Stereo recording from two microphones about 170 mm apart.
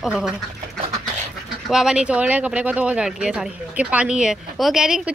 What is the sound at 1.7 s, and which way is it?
Speech, 5° right (ahead or behind).